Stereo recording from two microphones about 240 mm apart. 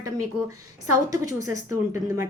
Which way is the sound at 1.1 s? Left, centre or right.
Centre.